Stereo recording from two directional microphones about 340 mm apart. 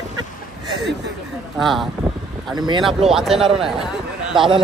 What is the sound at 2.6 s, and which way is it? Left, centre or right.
Speech, centre.